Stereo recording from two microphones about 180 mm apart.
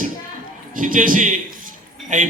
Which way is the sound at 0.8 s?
50° right (ahead or behind).